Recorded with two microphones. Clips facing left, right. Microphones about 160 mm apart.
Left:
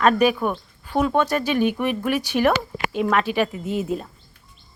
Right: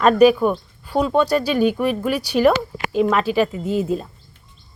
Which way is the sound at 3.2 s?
35° right (ahead or behind).